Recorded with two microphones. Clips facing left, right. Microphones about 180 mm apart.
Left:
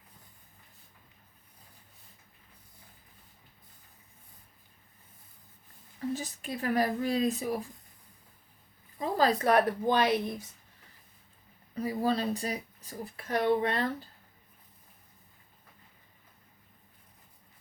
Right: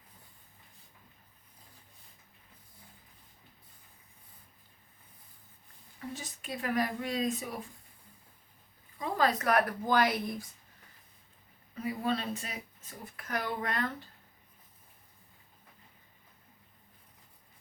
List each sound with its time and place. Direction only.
6.1 s speech: 35° left (ahead or behind)
9.0 s a woman's voice: 35° left (ahead or behind)
11.7 s speech: 35° left (ahead or behind)